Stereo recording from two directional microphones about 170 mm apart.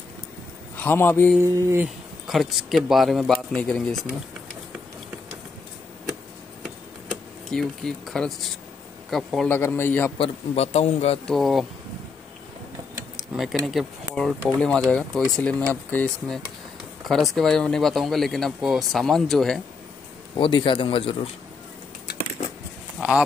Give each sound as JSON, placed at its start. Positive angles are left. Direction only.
{"t": 0.7, "sound": "a man's voice", "side_deg": 10}
{"t": 1.4, "sound": "a sound", "side_deg": -15}
{"t": 2.2, "sound": "speech", "side_deg": 0}
{"t": 6.6, "sound": "a sound", "side_deg": 5}
{"t": 9.1, "sound": "speech", "side_deg": 0}
{"t": 9.6, "sound": "a man's voice", "side_deg": 15}
{"t": 10.1, "sound": "a man's voice", "side_deg": 35}
{"t": 11.2, "sound": "speech", "side_deg": 0}
{"t": 13.3, "sound": "speech", "side_deg": 0}
{"t": 17.0, "sound": "speech", "side_deg": 0}
{"t": 20.3, "sound": "a man's voice", "side_deg": 30}
{"t": 22.9, "sound": "a sound", "side_deg": -5}